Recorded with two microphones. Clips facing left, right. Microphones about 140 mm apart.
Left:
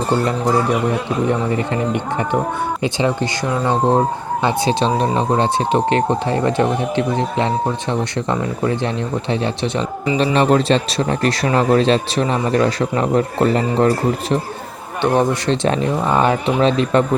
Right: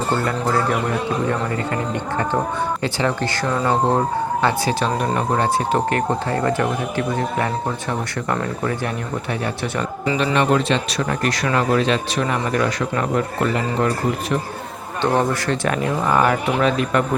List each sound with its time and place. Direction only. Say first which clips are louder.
0.3 s speech: left 3 dB; 20° left (ahead or behind)
10.3 s a man's voice: left 4 dB; 35° left (ahead or behind)
15.0 s speech: left 3 dB; 20° left (ahead or behind)